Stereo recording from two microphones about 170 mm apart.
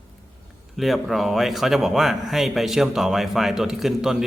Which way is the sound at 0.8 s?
Centre (ahead or behind).